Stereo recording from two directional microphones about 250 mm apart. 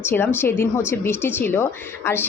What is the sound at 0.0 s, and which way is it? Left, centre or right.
A woman's voice, centre.